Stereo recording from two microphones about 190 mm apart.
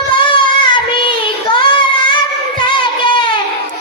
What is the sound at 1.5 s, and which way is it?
Child singing, 25° left (ahead or behind).